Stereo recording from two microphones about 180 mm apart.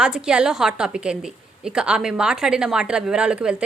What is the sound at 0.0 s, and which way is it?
A woman's voice, 5° right (ahead or behind).